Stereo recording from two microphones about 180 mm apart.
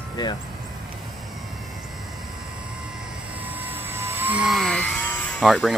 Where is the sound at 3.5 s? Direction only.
10° right (ahead or behind).